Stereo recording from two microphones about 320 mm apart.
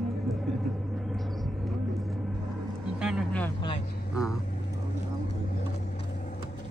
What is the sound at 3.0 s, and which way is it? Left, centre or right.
Vehicle, centre.